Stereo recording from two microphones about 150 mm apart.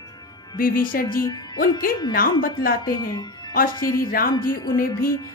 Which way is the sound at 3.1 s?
25° left (ahead or behind).